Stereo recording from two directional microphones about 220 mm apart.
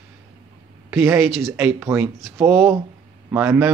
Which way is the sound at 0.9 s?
10° right (ahead or behind).